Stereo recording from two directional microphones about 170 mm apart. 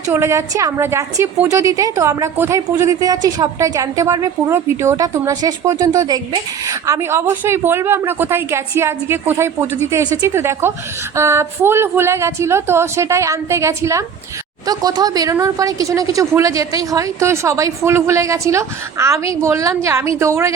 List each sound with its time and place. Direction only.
0.1 s a woman's voice: 15° right (ahead or behind)